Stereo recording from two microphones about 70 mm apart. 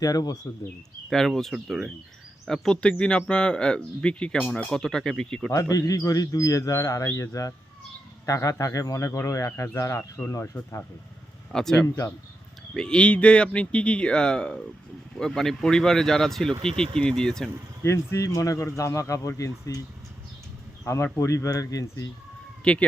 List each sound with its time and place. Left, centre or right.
0.0 s speech: left
1.1 s speech: centre
5.5 s a man's voice: left
11.5 s speech: centre
17.8 s a man's voice: left
20.8 s a man's voice: left
22.7 s speech: centre